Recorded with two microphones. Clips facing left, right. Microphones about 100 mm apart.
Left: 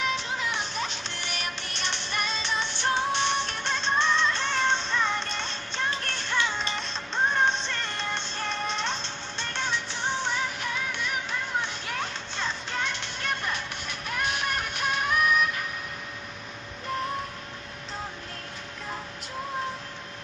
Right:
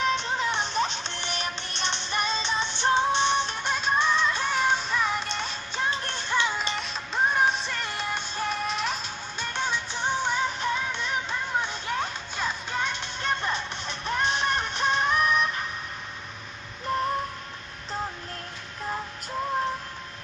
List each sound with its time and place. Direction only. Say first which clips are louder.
0.0 s music: right 4 dB; 35° right (ahead or behind)
16.9 s music: right 4 dB; 40° right (ahead or behind)